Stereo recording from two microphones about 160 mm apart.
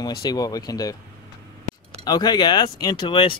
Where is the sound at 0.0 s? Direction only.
25° left (ahead or behind).